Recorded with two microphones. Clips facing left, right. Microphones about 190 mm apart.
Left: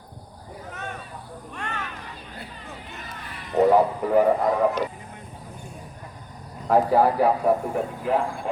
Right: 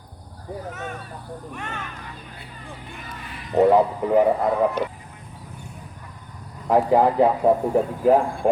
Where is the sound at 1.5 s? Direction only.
10° right (ahead or behind).